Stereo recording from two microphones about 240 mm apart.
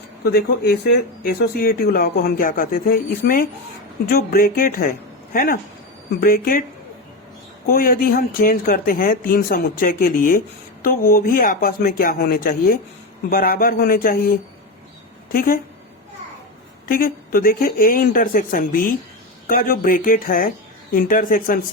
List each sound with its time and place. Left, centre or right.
0.3 s speech: left
7.7 s speech: left
16.9 s speech: left